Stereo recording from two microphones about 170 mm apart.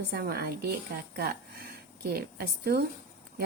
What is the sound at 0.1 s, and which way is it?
Speech, 65° right (ahead or behind).